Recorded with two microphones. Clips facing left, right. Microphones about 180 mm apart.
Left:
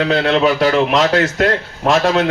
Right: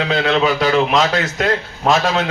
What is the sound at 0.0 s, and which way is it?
A man's voice, 55° left (ahead or behind).